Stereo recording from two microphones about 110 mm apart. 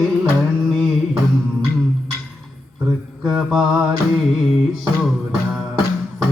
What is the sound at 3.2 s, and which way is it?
Mantra, centre (ahead or behind).